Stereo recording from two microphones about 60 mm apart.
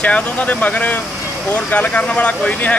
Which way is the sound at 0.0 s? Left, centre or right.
Left.